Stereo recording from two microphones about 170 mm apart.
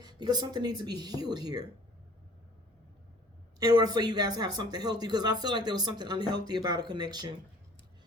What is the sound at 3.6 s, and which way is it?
Speech, 25° right (ahead or behind).